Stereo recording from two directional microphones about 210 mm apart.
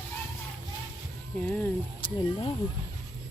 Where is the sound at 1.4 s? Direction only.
5° left (ahead or behind).